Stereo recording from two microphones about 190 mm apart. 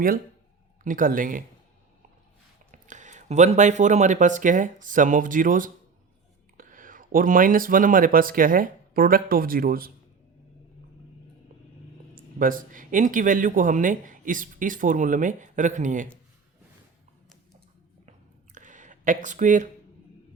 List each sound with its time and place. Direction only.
0.9 s speech: 45° right (ahead or behind)
2.7 s speech: 40° right (ahead or behind)
12.1 s speech: 45° right (ahead or behind)
18.5 s a sound: 40° right (ahead or behind)